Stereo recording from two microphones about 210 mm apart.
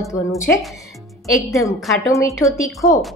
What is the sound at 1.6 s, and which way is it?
A woman's voice, 15° left (ahead or behind).